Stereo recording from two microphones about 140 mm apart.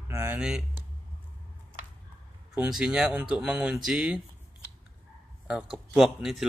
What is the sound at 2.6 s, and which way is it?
Speech, 5° right (ahead or behind).